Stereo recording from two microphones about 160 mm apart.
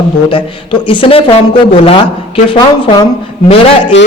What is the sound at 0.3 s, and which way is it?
Speech, 35° left (ahead or behind).